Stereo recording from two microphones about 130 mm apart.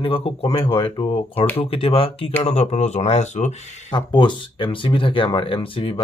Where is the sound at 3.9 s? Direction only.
35° left (ahead or behind).